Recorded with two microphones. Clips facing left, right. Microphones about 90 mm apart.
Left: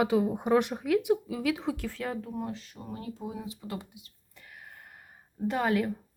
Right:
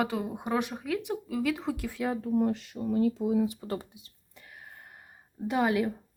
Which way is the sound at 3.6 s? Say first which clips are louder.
Right 4 dB; 40° right (ahead or behind).